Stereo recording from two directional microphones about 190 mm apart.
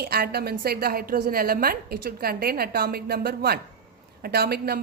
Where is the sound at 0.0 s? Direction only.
55° right (ahead or behind).